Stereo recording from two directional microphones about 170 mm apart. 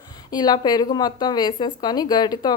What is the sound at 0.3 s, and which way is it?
Speech, 25° left (ahead or behind).